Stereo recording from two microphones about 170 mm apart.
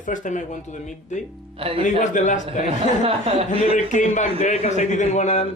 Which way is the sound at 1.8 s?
45° left (ahead or behind).